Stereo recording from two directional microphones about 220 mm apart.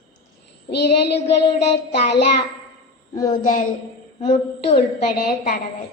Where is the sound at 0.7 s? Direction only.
50° left (ahead or behind).